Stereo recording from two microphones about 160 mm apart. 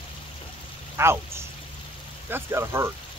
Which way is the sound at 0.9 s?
15° right (ahead or behind).